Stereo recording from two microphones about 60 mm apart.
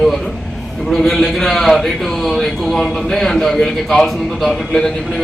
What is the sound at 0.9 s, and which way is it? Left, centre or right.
A man's voice, centre.